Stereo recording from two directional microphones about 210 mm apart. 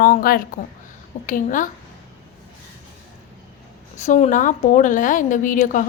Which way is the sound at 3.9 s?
35° left (ahead or behind).